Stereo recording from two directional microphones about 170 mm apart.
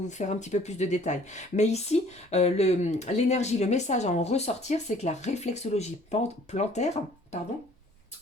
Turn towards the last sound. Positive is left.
turn(degrees=40)  # may be behind; listen again after turning